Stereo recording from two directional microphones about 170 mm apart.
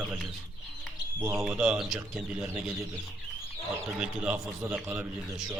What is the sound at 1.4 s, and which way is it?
Speech, 5° right (ahead or behind).